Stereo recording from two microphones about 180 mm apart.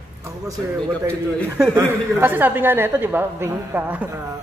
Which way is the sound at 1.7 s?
10° right (ahead or behind).